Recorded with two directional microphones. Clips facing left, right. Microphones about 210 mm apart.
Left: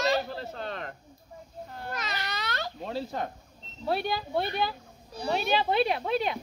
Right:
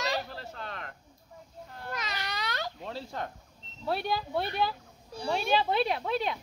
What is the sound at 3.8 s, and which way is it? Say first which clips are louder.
Speech: left 2 dB; centre (ahead or behind).